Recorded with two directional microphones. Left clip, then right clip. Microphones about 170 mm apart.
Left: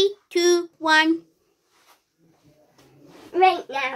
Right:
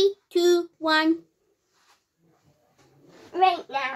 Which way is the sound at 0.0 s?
15° right (ahead or behind).